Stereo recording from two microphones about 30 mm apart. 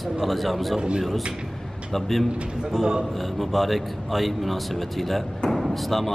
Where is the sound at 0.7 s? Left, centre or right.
Right.